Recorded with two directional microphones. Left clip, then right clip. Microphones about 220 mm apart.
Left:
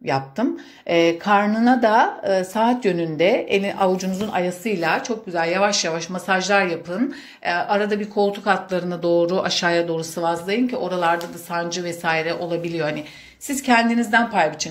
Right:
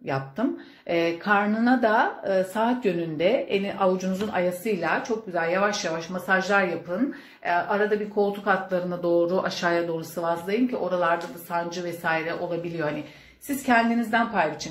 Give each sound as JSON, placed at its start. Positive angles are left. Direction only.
{"t": 0.0, "sound": "speech", "side_deg": 30}